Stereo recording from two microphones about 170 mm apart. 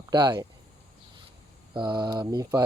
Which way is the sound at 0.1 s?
25° right (ahead or behind).